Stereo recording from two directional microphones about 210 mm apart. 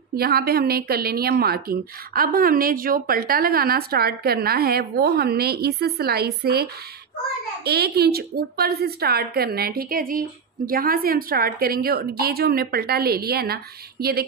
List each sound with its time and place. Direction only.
0.1 s a woman's voice: 45° right (ahead or behind)